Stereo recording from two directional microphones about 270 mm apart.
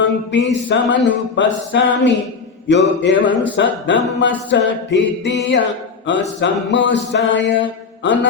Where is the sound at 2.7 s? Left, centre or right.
Left.